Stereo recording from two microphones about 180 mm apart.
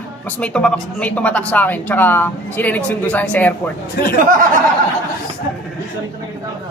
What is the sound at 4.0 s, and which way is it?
Speech, 65° left (ahead or behind).